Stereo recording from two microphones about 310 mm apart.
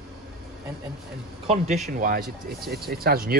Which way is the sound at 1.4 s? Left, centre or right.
Right.